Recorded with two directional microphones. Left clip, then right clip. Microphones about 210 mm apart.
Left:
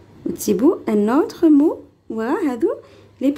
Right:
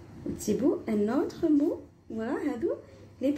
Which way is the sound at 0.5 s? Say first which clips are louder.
Left 11 dB; 45° left (ahead or behind).